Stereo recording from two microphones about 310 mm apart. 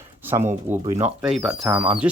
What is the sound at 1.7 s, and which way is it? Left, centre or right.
Speech, centre.